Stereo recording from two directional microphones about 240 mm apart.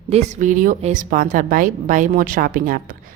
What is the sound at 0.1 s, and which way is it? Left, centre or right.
Speech, right.